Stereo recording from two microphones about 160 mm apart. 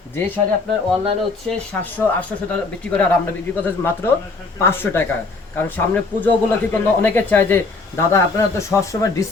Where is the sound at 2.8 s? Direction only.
10° left (ahead or behind).